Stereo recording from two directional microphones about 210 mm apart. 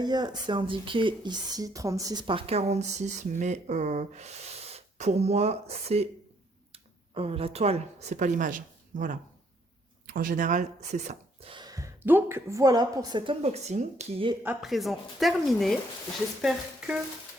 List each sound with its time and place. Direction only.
0.0 s speech: 20° right (ahead or behind)
14.4 s a woman's voice: centre (ahead or behind)